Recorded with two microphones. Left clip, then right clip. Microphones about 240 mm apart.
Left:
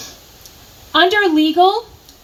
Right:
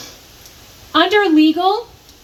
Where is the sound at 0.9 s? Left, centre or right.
Left.